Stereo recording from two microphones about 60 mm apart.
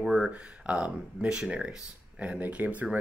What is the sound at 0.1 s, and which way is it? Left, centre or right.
Speech, right.